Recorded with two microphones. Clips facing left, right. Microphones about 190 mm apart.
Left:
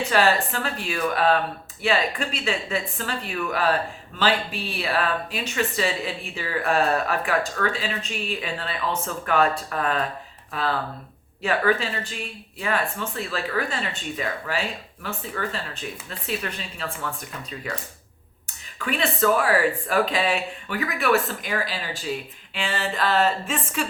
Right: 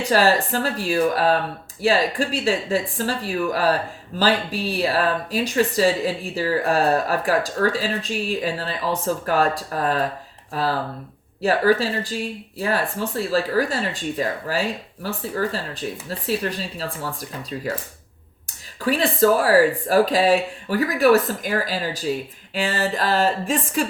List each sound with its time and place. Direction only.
0.1 s speech: 40° right (ahead or behind)
18.8 s speech: 35° right (ahead or behind)